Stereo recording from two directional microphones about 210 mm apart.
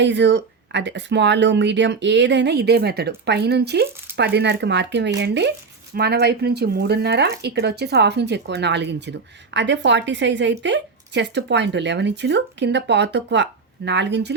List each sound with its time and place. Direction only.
0.0 s speech: 55° right (ahead or behind)